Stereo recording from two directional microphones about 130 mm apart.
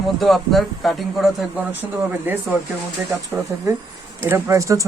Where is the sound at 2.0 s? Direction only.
15° right (ahead or behind).